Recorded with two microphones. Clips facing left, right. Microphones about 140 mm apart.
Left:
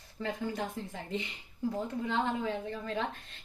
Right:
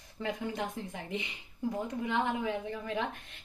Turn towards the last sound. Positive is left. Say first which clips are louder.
# even
turn(degrees=-15)  # may be behind; listen again after turning